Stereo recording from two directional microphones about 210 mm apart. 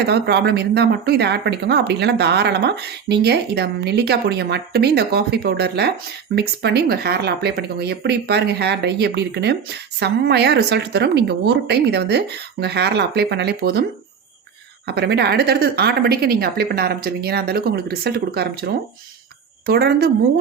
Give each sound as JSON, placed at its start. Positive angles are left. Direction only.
{"t": 0.0, "sound": "speech", "side_deg": -50}
{"t": 14.8, "sound": "speech", "side_deg": -50}